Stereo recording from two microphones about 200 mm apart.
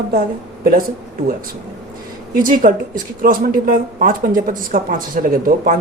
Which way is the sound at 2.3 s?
45° right (ahead or behind).